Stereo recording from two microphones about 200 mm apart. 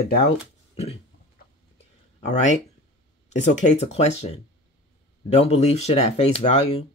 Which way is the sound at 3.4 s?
35° left (ahead or behind).